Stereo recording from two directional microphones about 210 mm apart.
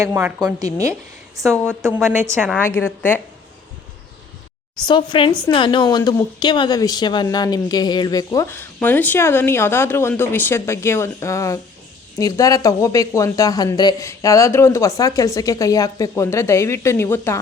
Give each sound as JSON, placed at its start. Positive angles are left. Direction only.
{"t": 0.0, "sound": "a woman's voice", "side_deg": -10}
{"t": 0.6, "sound": "a woman's voice", "side_deg": -15}
{"t": 1.4, "sound": "a woman's voice", "side_deg": 5}
{"t": 2.0, "sound": "a woman's voice", "side_deg": -10}
{"t": 2.6, "sound": "a woman's voice", "side_deg": 10}
{"t": 4.9, "sound": "a woman's voice", "side_deg": 20}